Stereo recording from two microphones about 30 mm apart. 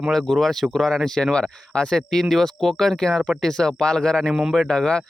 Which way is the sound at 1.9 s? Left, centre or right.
Centre.